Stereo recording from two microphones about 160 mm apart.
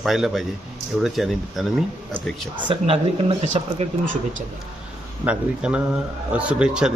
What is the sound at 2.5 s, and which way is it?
Speech, 35° right (ahead or behind).